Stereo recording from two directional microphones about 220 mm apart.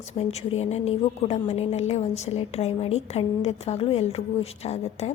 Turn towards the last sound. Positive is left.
turn(degrees=30)  # may be behind; listen again after turning